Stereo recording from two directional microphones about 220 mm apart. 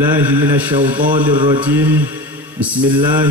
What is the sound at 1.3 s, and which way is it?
Mantra, 20° right (ahead or behind).